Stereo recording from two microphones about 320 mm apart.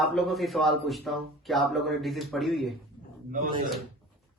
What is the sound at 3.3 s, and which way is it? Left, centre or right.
Speech, right.